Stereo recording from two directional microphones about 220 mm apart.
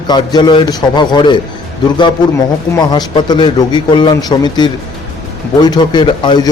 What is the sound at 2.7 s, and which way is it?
A man's voice, 20° left (ahead or behind).